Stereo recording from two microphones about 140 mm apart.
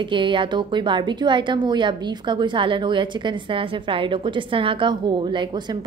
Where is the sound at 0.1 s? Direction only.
35° right (ahead or behind).